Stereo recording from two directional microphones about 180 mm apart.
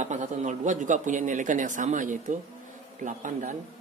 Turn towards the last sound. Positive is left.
turn(degrees=-45)  # may be behind; listen again after turning